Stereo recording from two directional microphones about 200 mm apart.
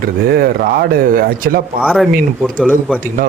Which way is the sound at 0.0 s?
50° right (ahead or behind).